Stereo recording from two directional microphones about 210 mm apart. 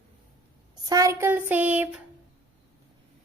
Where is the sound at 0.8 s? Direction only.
15° right (ahead or behind).